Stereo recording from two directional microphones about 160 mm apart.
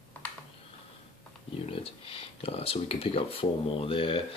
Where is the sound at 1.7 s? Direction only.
35° left (ahead or behind).